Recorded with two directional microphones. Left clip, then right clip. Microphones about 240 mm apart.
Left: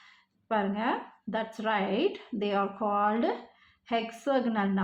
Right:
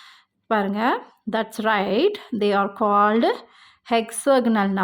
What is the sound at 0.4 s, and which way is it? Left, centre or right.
A woman's voice, right.